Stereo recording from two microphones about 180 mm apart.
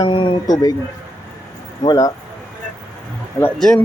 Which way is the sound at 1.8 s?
20° left (ahead or behind).